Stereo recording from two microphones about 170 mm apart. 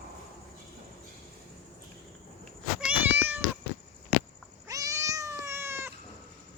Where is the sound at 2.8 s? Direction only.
10° right (ahead or behind).